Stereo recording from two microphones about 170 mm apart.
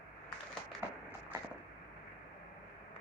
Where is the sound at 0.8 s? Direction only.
15° right (ahead or behind).